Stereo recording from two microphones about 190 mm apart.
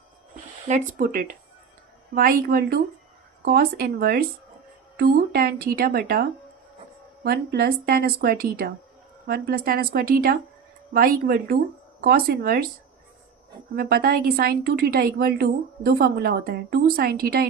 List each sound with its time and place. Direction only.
0.7 s a woman's voice: 45° right (ahead or behind)
7.3 s a woman's voice: 55° right (ahead or behind)
13.7 s a woman's voice: 55° right (ahead or behind)